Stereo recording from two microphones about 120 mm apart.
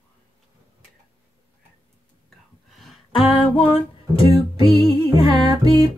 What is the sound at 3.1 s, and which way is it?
Music, 50° left (ahead or behind).